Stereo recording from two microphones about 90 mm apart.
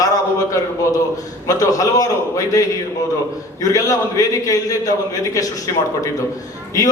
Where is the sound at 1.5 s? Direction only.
40° left (ahead or behind).